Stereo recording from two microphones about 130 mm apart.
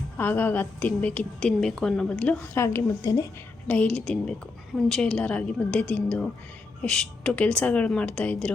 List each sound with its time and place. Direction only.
0.2 s a woman's voice: 15° left (ahead or behind)
2.6 s speech: 20° left (ahead or behind)
3.7 s a woman's voice: 10° left (ahead or behind)